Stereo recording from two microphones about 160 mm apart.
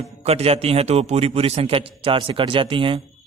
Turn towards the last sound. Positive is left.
turn(degrees=-30)  # may be behind; listen again after turning